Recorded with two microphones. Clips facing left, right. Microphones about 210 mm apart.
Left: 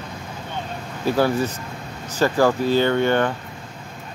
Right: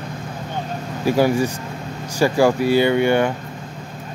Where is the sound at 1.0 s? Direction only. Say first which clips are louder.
Right 3 dB; 10° right (ahead or behind).